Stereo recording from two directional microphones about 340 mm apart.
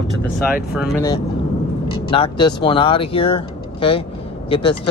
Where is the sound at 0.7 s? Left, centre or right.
Centre.